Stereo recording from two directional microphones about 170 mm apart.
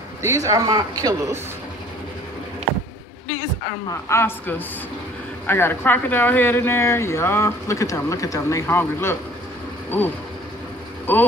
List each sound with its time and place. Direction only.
0.2 s a man's voice: 20° right (ahead or behind)
3.3 s speech: 20° left (ahead or behind)